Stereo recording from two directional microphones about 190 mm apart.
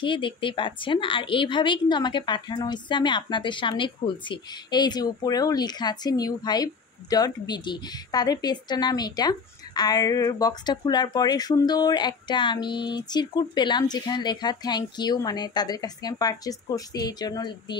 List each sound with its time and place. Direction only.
0.0 s a woman's voice: 25° left (ahead or behind)